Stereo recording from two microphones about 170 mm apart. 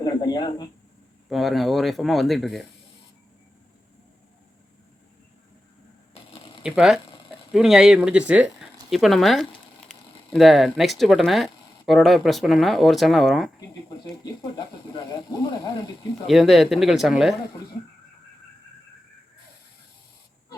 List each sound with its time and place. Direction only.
0.0 s a sound: 25° left (ahead or behind)
1.3 s speech: centre (ahead or behind)
6.6 s speech: 5° right (ahead or behind)
8.3 s a sound: 5° right (ahead or behind)
10.3 s speech: centre (ahead or behind)
14.5 s speech: 25° left (ahead or behind)
16.2 s speech: centre (ahead or behind)